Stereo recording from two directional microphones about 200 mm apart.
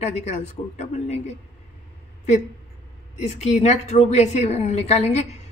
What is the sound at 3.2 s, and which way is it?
A woman's voice, 35° left (ahead or behind).